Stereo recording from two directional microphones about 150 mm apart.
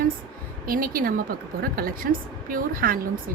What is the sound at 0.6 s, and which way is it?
Speech, 70° right (ahead or behind).